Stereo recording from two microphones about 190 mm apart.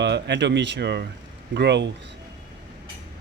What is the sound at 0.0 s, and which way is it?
Speech, 65° right (ahead or behind).